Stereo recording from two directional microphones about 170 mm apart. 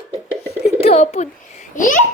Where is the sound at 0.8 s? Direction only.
35° left (ahead or behind).